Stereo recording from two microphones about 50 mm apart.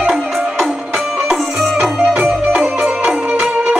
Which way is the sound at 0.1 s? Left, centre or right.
Centre.